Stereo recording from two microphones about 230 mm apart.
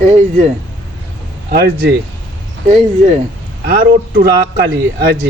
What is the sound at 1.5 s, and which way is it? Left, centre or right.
Speech, right.